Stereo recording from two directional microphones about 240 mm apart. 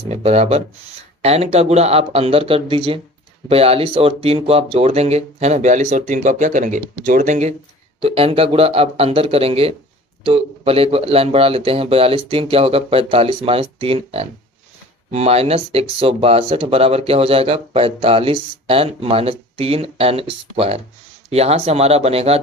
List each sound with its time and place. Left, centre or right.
0.1 s speech: right